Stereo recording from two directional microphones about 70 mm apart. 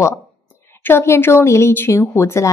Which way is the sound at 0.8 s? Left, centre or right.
Left.